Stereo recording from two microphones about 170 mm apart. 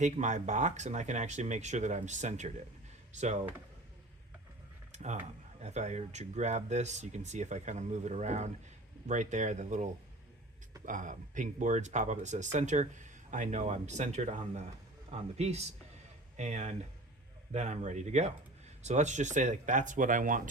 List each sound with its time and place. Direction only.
0.0 s speech: 45° right (ahead or behind)
4.9 s a man's voice: 40° right (ahead or behind)